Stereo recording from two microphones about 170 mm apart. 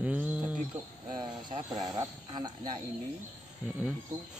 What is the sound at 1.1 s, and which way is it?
Speech, 25° right (ahead or behind).